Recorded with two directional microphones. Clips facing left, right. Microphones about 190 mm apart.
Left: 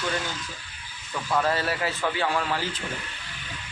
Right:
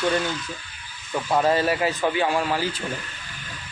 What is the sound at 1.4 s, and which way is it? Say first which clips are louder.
A man's voice: right 5 dB; 15° right (ahead or behind).